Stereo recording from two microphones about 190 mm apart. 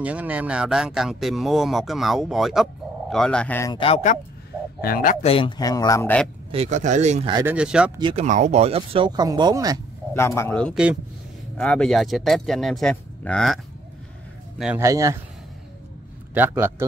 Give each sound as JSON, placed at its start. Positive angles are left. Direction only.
{"t": 0.0, "sound": "speech", "side_deg": -5}
{"t": 3.7, "sound": "speech", "side_deg": 30}
{"t": 4.8, "sound": "speech", "side_deg": 50}
{"t": 5.2, "sound": "speech", "side_deg": 30}
{"t": 6.5, "sound": "speech", "side_deg": -35}
{"t": 7.4, "sound": "speech", "side_deg": -5}
{"t": 8.0, "sound": "speech", "side_deg": -30}
{"t": 10.1, "sound": "a man's voice", "side_deg": 15}
{"t": 14.8, "sound": "a man's voice", "side_deg": -15}
{"t": 16.3, "sound": "a man's voice", "side_deg": -10}